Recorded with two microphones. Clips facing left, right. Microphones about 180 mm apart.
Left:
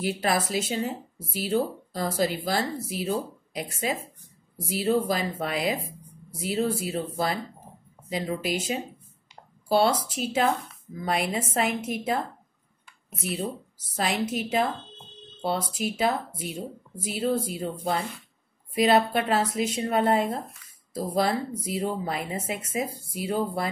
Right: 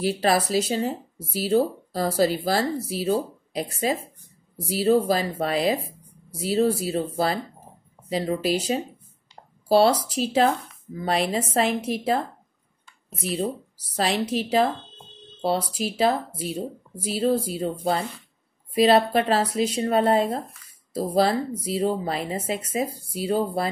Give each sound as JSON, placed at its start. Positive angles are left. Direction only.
{"t": 0.0, "sound": "speech", "side_deg": -35}
{"t": 13.7, "sound": "speech", "side_deg": -35}